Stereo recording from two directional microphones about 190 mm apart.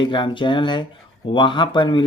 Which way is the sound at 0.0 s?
25° left (ahead or behind).